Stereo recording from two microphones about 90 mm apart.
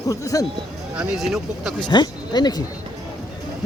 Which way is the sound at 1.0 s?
5° right (ahead or behind).